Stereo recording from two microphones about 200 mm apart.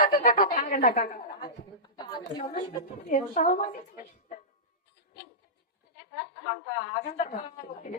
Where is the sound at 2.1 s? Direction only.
20° left (ahead or behind).